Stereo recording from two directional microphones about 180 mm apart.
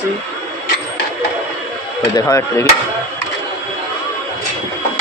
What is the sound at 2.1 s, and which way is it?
Speech, 15° left (ahead or behind).